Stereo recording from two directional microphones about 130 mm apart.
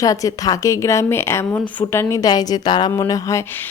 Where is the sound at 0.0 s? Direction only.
25° left (ahead or behind).